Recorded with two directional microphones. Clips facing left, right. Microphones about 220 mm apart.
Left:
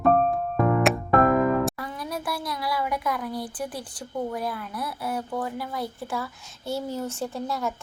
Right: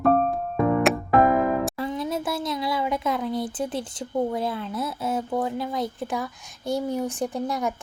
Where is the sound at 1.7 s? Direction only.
25° right (ahead or behind).